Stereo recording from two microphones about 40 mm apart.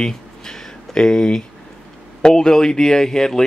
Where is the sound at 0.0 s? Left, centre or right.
Centre.